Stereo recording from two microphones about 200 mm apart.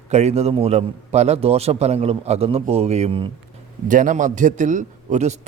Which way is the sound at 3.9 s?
40° right (ahead or behind).